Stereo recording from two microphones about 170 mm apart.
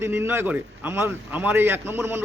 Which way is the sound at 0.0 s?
10° right (ahead or behind).